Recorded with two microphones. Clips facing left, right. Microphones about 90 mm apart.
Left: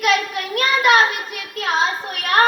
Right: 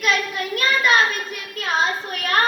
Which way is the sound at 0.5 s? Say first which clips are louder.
Left 3 dB; 70° left (ahead or behind).